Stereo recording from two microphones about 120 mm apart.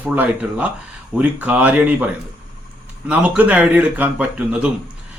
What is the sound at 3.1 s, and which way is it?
A man's voice, 10° right (ahead or behind).